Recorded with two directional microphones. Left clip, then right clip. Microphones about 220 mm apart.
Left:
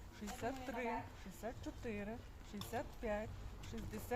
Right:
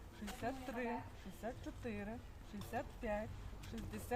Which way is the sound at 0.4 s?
20° left (ahead or behind).